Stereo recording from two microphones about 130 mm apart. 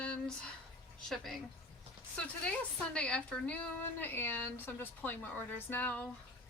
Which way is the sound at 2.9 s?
10° left (ahead or behind).